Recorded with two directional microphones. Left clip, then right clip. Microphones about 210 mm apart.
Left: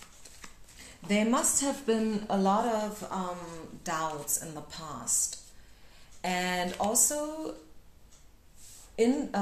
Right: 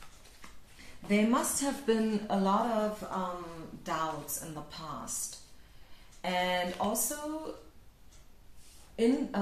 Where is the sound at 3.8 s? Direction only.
45° left (ahead or behind).